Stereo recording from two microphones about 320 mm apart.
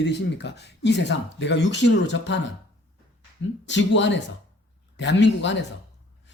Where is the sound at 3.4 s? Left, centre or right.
Left.